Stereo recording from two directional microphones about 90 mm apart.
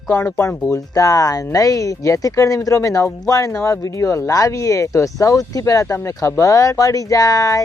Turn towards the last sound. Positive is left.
turn(degrees=40)  # may be behind; listen again after turning